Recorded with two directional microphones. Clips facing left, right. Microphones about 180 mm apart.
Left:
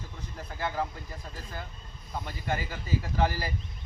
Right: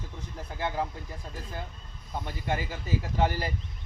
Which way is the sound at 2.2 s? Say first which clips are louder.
Right 1 dB; 20° right (ahead or behind).